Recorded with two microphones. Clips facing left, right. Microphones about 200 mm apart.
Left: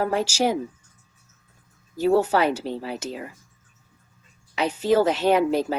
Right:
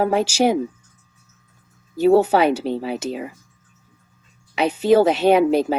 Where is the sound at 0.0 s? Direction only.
65° right (ahead or behind).